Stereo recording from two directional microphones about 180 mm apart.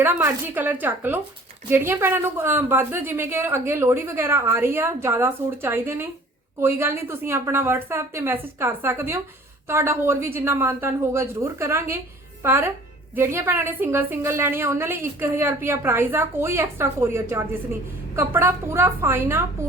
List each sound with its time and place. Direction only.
0.0 s a woman's voice: 10° right (ahead or behind)